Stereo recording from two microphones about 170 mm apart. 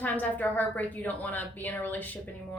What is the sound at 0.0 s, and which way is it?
Speech, 10° left (ahead or behind).